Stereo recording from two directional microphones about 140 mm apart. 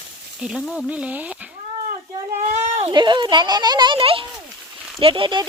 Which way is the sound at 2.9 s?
35° right (ahead or behind).